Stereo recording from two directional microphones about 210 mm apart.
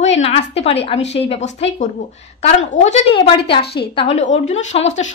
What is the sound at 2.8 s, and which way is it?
Speech, 30° left (ahead or behind).